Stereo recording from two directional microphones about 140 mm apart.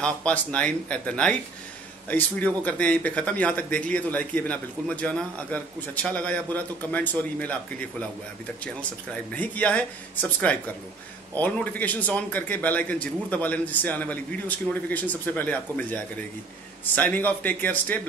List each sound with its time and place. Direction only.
0.0 s a man's voice: 10° left (ahead or behind)